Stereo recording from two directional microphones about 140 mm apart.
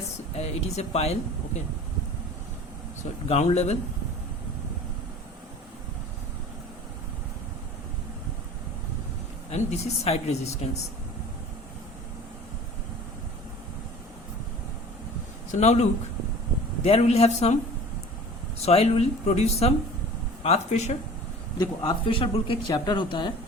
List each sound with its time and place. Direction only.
0.3 s speech: 50° left (ahead or behind)
3.2 s speech: 50° left (ahead or behind)
9.5 s speech: 50° left (ahead or behind)
15.6 s speech: 50° left (ahead or behind)
18.6 s speech: 45° left (ahead or behind)
21.6 s a man's voice: 35° left (ahead or behind)